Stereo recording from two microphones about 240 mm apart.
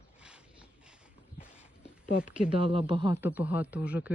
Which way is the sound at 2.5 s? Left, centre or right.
Right.